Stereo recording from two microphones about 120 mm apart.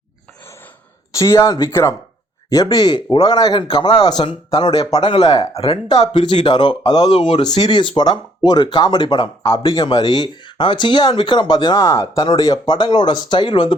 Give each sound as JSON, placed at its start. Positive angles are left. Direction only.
{"t": 1.1, "sound": "speech", "side_deg": 25}
{"t": 5.5, "sound": "speech", "side_deg": 55}
{"t": 6.4, "sound": "speech", "side_deg": 40}